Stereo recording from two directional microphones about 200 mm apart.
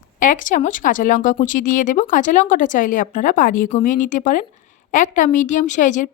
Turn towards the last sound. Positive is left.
turn(degrees=40)  # may be behind; listen again after turning